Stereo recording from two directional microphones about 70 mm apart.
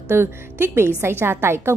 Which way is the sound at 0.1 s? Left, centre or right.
Right.